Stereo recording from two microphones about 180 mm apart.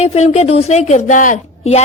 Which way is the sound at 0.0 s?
35° left (ahead or behind).